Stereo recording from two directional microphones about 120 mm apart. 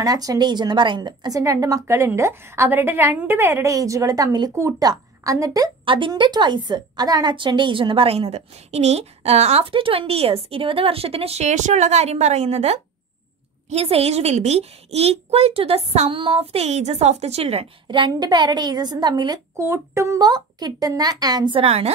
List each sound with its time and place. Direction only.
0.0 s a woman's voice: 30° right (ahead or behind)
5.9 s a woman's voice: 45° right (ahead or behind); by 17.6 s 60° right (ahead or behind)
17.8 s speech: 40° right (ahead or behind)
19.6 s speech: 25° right (ahead or behind)
21.5 s a woman's voice: 60° right (ahead or behind)